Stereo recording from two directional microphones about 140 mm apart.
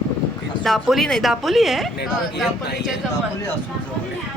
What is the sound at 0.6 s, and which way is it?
A woman's voice, centre (ahead or behind).